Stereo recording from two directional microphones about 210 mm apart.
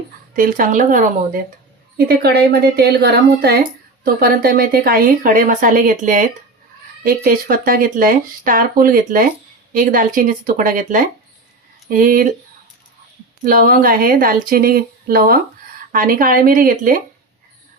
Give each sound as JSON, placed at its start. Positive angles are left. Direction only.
{"t": 0.3, "sound": "speech", "side_deg": -40}
{"t": 2.0, "sound": "speech", "side_deg": -50}
{"t": 13.4, "sound": "speech", "side_deg": -40}